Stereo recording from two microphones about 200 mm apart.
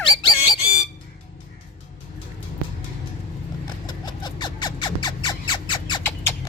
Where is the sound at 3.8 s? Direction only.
20° left (ahead or behind).